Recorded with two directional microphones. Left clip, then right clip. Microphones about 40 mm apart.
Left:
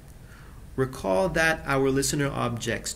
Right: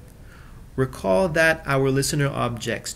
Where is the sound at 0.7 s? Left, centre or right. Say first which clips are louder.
Right 4 dB; right.